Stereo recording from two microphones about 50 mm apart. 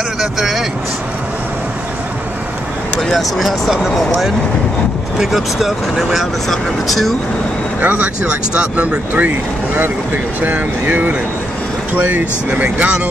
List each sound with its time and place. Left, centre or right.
0.2 s speech: centre
3.0 s speech: centre
5.1 s speech: centre
7.8 s speech: right
10.4 s speech: right
12.4 s speech: right